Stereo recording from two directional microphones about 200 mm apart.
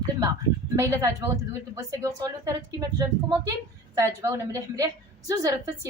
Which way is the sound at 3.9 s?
15° right (ahead or behind).